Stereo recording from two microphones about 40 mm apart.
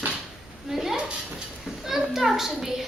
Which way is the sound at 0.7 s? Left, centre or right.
Centre.